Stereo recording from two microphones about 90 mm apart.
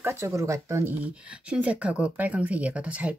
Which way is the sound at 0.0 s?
30° right (ahead or behind).